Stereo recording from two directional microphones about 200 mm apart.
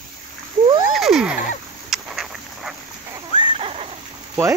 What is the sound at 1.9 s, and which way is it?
Dog, centre (ahead or behind).